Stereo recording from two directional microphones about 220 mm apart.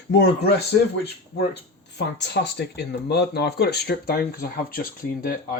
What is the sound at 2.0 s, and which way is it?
Speech, 50° left (ahead or behind).